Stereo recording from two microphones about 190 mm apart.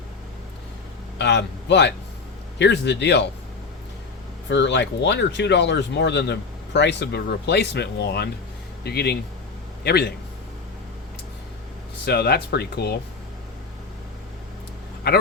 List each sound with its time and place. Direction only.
1.2 s speech: 65° left (ahead or behind)
4.4 s speech: 65° left (ahead or behind)
12.0 s speech: 60° left (ahead or behind)